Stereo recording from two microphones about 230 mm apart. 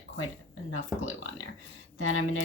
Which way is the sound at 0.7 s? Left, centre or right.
Left.